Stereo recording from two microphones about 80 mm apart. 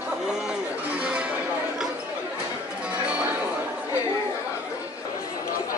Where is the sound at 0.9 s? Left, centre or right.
Centre.